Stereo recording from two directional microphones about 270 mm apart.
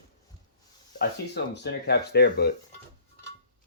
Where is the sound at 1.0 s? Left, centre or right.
Left.